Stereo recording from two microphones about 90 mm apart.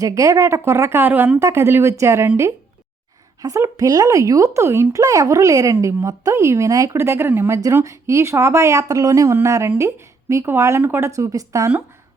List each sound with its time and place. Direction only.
0.0 s speech: 35° right (ahead or behind)